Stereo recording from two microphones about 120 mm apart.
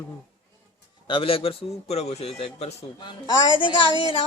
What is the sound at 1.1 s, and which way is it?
A man's voice, 50° left (ahead or behind).